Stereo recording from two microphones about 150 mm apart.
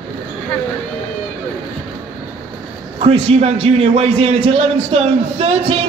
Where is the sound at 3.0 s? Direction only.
45° right (ahead or behind).